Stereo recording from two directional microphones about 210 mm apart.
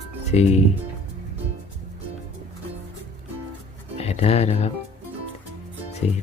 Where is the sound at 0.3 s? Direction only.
30° left (ahead or behind).